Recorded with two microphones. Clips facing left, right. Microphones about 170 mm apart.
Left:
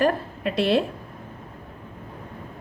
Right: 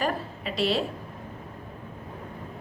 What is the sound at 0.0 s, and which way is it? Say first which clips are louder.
Speech: left 7 dB; 55° left (ahead or behind).